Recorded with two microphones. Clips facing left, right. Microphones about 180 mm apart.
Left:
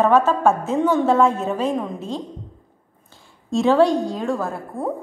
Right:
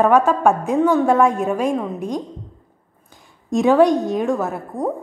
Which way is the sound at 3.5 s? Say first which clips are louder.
Right 2 dB; 15° right (ahead or behind).